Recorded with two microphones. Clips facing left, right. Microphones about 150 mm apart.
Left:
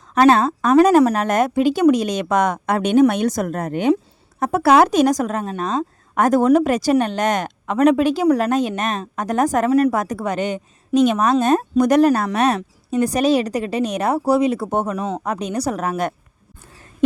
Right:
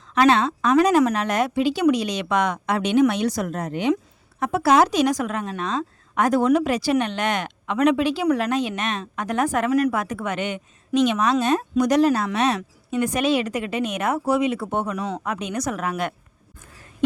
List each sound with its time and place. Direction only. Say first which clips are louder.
0.1 s a woman's voice: left 4 dB; 45° left (ahead or behind)
4.6 s a woman's voice: left 4 dB; 60° left (ahead or behind)
12.5 s a woman's voice: left 4 dB; 35° left (ahead or behind)